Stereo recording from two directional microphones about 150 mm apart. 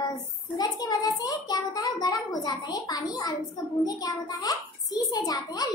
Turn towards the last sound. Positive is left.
turn(degrees=25)  # may be behind; listen again after turning